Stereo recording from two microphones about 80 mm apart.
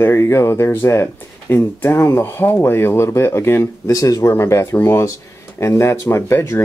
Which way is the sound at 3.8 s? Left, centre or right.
Left.